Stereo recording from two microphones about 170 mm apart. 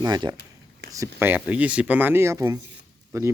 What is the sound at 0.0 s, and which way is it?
Speech, 25° right (ahead or behind).